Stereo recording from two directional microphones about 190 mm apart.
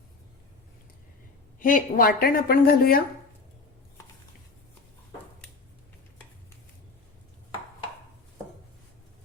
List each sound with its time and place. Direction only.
1.5 s a woman's voice: 45° left (ahead or behind)